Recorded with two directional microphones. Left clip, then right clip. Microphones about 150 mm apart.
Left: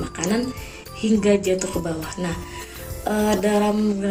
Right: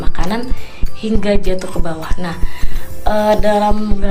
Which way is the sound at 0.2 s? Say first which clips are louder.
Right 3 dB; 15° left (ahead or behind).